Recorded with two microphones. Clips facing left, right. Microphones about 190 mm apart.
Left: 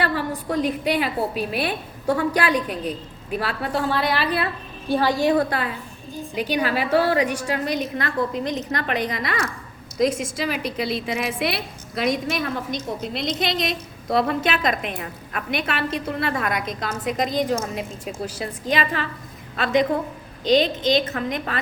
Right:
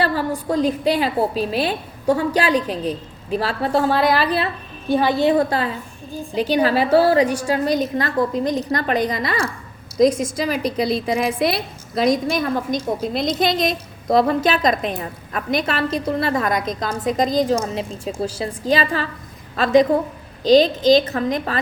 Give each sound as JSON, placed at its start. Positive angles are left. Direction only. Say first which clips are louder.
{"t": 0.0, "sound": "a woman's voice", "louder": "right 4 dB", "side_deg": -35}
{"t": 4.9, "sound": "a woman's voice", "louder": "right 3 dB", "side_deg": -20}
{"t": 6.3, "sound": "a woman's voice", "louder": "right 6 dB", "side_deg": -35}